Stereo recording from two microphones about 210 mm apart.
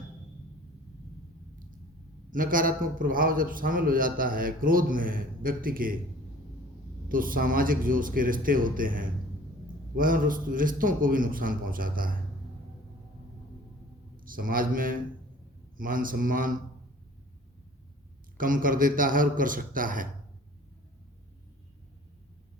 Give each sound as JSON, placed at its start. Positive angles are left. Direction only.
{"t": 2.3, "sound": "a man's voice", "side_deg": -40}
{"t": 7.1, "sound": "a man's voice", "side_deg": -40}
{"t": 14.2, "sound": "a man's voice", "side_deg": -40}
{"t": 18.3, "sound": "a man's voice", "side_deg": -40}